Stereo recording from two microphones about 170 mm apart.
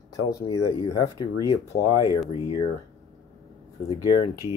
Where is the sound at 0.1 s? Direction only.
20° left (ahead or behind).